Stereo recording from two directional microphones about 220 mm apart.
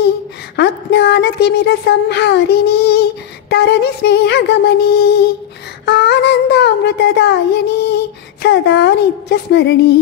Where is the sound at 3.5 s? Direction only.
50° left (ahead or behind).